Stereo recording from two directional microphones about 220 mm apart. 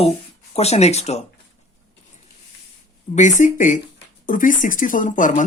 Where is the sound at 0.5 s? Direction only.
30° left (ahead or behind).